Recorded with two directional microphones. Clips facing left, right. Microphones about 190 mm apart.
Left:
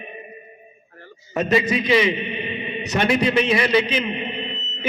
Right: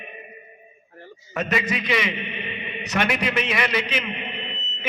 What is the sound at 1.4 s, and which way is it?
A man's voice, 30° left (ahead or behind).